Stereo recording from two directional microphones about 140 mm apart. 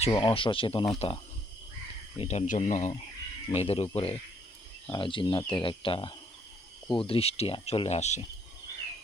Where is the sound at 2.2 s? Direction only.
55° left (ahead or behind).